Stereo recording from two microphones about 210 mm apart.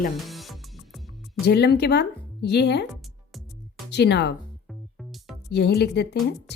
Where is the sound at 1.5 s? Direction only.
50° left (ahead or behind).